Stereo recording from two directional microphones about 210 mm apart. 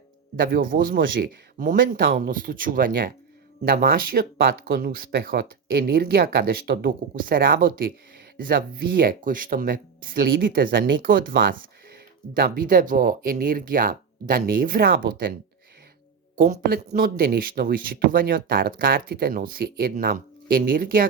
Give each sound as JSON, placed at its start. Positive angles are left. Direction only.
{"t": 0.4, "sound": "speech", "side_deg": -45}
{"t": 16.4, "sound": "speech", "side_deg": -40}